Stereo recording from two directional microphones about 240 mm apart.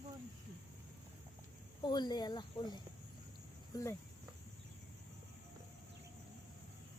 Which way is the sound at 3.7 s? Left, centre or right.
Centre.